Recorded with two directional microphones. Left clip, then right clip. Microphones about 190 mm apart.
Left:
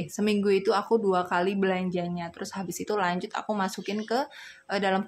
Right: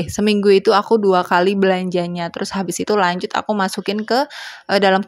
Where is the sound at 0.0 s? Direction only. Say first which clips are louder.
Right 11 dB; 35° right (ahead or behind).